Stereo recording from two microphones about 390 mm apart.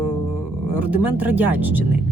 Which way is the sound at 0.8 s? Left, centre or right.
Centre.